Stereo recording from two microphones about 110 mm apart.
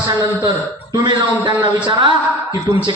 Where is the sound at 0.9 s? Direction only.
40° right (ahead or behind).